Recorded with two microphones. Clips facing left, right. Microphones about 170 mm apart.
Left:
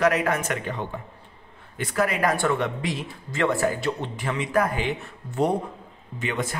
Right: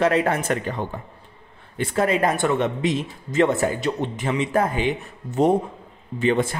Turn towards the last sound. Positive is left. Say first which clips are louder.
# right 8 dB
turn(degrees=-30)  # may be behind; listen again after turning